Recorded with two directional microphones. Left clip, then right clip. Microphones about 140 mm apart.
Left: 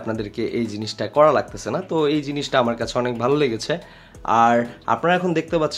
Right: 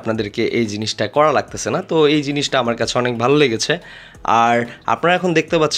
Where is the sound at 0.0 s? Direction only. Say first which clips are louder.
Right 6 dB; 30° right (ahead or behind).